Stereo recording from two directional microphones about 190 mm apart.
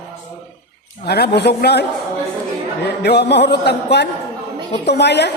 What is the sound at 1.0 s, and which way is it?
Speech, 60° left (ahead or behind).